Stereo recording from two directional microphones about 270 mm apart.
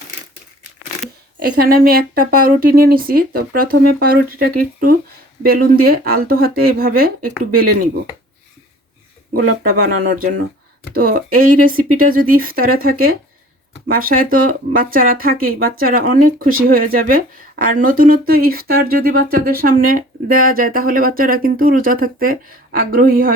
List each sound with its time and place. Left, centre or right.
1.4 s speech: right
9.3 s speech: right